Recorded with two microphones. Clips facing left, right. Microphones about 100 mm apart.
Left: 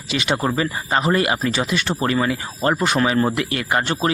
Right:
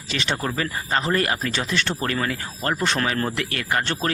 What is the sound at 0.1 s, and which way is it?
Speech, 15° left (ahead or behind).